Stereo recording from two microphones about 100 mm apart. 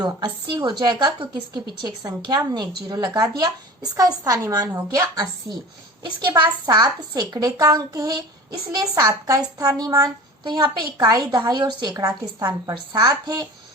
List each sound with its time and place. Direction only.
0.0 s a woman's voice: 45° right (ahead or behind)